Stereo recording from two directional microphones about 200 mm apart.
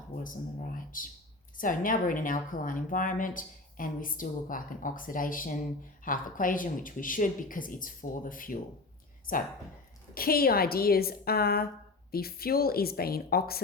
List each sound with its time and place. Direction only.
0.9 s a woman's voice: 45° left (ahead or behind)
10.2 s a woman's voice: 50° left (ahead or behind)